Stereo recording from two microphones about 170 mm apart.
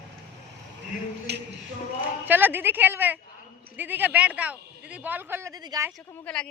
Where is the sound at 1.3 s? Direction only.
75° right (ahead or behind).